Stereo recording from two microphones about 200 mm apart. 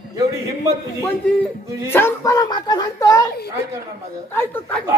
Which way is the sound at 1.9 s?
15° left (ahead or behind).